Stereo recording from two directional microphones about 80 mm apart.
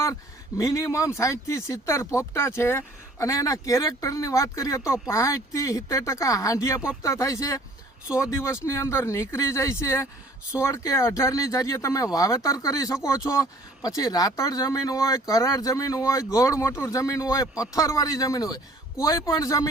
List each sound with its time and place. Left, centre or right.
0.0 s speech: left